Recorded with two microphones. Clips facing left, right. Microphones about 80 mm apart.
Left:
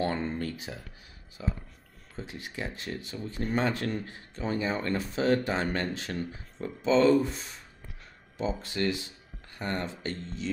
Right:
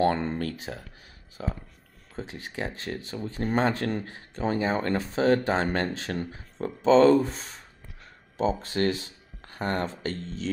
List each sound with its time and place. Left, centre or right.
0.0 s speech: right
2.1 s speech: right